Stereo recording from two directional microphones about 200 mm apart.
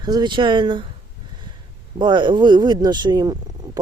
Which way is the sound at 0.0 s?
20° right (ahead or behind).